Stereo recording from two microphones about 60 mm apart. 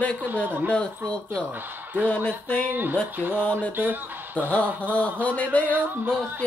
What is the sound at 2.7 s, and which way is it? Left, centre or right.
Speech, right.